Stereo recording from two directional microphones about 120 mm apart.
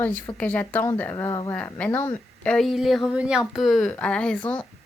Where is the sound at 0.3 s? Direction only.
15° left (ahead or behind).